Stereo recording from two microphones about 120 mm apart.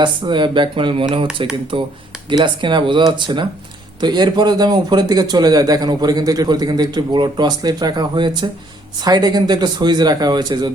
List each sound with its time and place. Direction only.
0.0 s speech: 40° right (ahead or behind)